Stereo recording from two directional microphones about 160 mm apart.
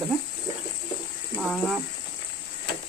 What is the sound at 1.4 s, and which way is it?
Speech, centre (ahead or behind).